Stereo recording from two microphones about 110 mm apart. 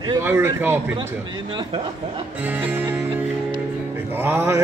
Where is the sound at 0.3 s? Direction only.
20° right (ahead or behind).